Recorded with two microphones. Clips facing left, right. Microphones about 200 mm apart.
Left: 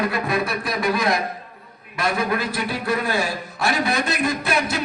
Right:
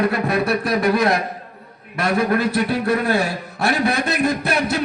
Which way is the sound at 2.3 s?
60° right (ahead or behind).